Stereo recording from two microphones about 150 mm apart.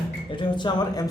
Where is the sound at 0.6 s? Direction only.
25° left (ahead or behind).